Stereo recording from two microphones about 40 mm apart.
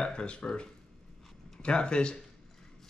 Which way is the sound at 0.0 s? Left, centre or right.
Left.